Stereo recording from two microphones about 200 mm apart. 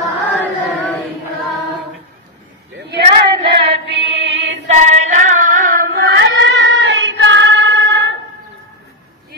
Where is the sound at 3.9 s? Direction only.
60° right (ahead or behind).